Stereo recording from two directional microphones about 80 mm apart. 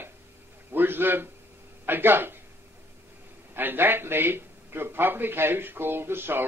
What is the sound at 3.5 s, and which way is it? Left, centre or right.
A man's voice, right.